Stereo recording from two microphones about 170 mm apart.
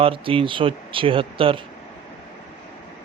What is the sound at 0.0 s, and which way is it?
A man's voice, 30° right (ahead or behind).